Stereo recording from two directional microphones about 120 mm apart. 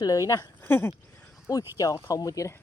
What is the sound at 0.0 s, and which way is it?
Speech, 30° left (ahead or behind).